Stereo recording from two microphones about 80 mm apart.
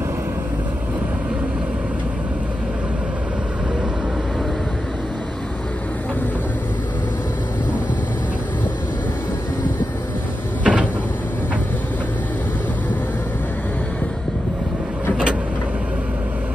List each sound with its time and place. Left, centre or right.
10.6 s cupboard open or close: centre